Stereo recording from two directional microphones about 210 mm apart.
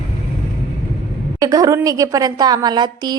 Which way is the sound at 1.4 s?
15° right (ahead or behind).